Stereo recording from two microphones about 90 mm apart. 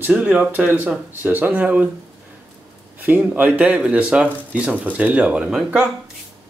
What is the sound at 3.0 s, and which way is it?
Speech, 20° right (ahead or behind).